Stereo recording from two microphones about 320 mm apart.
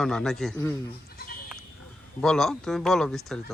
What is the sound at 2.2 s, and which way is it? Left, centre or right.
Speech, centre.